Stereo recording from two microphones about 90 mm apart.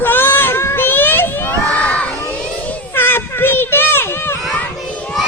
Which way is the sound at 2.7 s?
25° left (ahead or behind).